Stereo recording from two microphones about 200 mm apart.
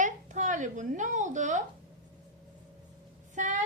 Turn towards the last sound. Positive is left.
turn(degrees=-40)  # may be behind; listen again after turning